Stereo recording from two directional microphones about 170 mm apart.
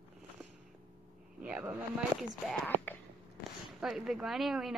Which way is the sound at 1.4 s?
5° right (ahead or behind).